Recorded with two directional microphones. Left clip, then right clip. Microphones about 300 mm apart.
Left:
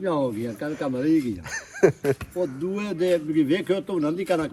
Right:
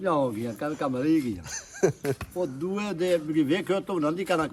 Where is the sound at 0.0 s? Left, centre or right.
Centre.